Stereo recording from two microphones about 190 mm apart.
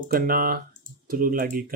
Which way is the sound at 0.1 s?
50° right (ahead or behind).